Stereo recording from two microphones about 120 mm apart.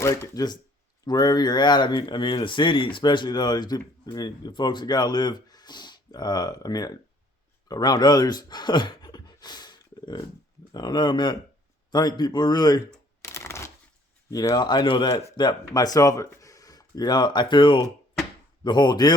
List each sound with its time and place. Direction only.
0.3 s speech: 35° left (ahead or behind)
13.3 s a sound: 25° left (ahead or behind)
14.3 s speech: 30° left (ahead or behind)